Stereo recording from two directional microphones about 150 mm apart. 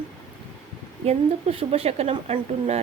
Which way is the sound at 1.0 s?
40° right (ahead or behind).